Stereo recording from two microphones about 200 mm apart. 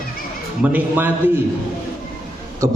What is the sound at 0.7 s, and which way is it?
Speech, 10° right (ahead or behind).